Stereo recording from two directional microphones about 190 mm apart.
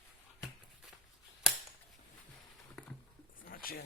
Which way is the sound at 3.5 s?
50° left (ahead or behind).